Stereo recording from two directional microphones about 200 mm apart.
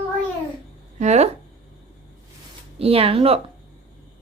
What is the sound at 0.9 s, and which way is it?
Speech, 35° right (ahead or behind).